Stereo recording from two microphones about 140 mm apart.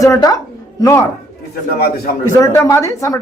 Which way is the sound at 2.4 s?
20° left (ahead or behind).